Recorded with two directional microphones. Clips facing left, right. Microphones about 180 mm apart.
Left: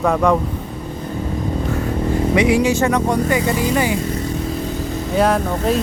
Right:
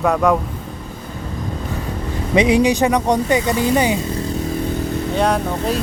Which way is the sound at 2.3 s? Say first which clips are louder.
Right 3 dB; 20° right (ahead or behind).